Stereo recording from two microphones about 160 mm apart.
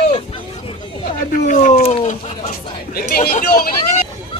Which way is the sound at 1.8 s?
45° left (ahead or behind).